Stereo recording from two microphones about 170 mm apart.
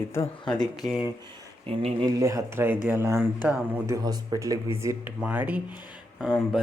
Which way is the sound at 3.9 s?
20° right (ahead or behind).